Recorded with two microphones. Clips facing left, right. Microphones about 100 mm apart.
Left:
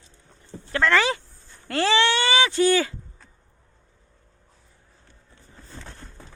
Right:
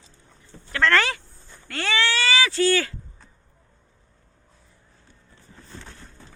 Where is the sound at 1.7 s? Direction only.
30° left (ahead or behind).